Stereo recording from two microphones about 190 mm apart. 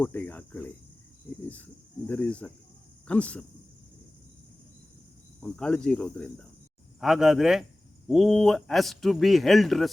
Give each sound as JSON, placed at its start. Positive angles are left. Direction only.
{"t": 0.0, "sound": "speech", "side_deg": 10}
{"t": 5.4, "sound": "speech", "side_deg": 5}